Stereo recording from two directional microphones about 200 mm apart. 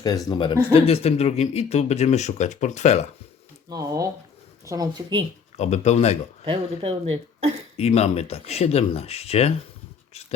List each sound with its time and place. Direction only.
0.3 s speech: 25° left (ahead or behind)
3.7 s speech: 15° right (ahead or behind)
5.5 s speech: 35° left (ahead or behind)
6.4 s speech: 25° right (ahead or behind)
7.8 s speech: 30° left (ahead or behind)